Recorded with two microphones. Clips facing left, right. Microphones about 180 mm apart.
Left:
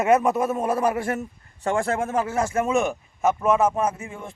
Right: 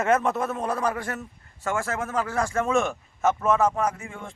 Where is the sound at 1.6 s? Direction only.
30° left (ahead or behind).